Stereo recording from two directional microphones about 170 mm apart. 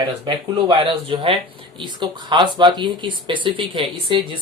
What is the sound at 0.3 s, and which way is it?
Speech, 30° right (ahead or behind).